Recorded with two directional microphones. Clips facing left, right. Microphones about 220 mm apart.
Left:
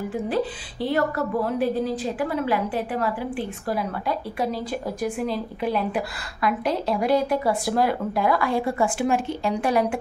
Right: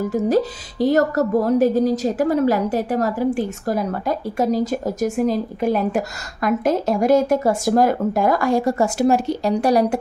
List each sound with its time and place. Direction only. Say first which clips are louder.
0.0 s a woman's voice: right 7 dB; 40° right (ahead or behind)